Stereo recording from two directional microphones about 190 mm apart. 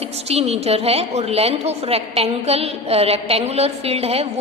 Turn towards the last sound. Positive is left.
turn(degrees=-30)  # may be behind; listen again after turning